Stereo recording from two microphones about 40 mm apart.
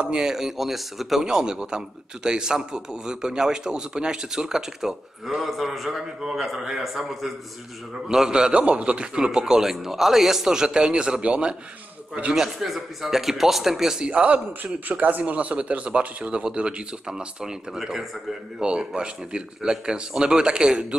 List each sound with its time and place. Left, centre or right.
0.0 s a man's voice: centre
8.1 s a man's voice: centre
12.4 s a man's voice: centre
14.2 s a man's voice: right; by 18.0 s centre
18.6 s a man's voice: right